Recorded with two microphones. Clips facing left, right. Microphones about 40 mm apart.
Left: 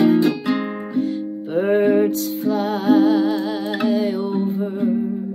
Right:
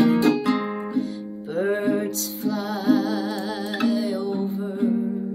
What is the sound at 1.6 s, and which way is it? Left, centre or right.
Music, left.